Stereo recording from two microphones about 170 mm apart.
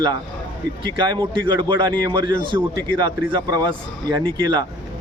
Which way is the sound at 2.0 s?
25° right (ahead or behind).